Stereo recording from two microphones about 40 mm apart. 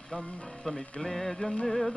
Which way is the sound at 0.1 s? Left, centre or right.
Left.